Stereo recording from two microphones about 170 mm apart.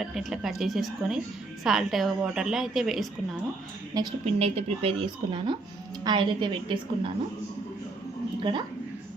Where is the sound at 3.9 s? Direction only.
20° right (ahead or behind).